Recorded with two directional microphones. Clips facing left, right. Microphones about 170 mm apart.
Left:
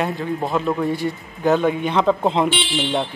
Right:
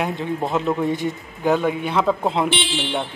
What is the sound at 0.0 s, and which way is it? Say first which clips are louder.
A man's voice: left 1 dB; 20° right (ahead or behind).